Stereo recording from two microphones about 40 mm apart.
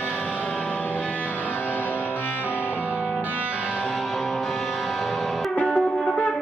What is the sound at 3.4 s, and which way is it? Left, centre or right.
Music, right.